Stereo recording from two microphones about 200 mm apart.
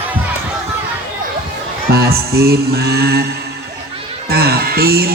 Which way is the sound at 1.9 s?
50° right (ahead or behind).